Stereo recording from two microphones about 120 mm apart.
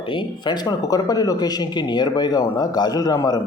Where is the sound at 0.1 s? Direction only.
40° left (ahead or behind).